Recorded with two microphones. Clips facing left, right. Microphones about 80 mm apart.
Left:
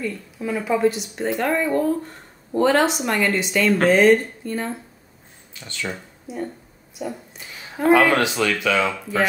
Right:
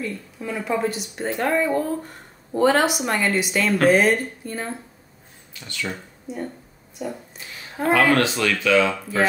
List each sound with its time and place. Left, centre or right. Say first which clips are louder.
0.0 s a woman's voice: left 2 dB; centre
5.5 s speech: even; left
6.3 s a woman's voice: left 1 dB; centre